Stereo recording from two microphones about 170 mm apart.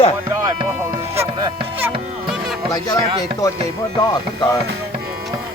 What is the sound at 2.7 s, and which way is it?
Speech, 20° left (ahead or behind).